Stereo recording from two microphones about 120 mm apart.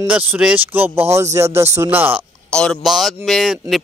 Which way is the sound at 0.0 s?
15° right (ahead or behind).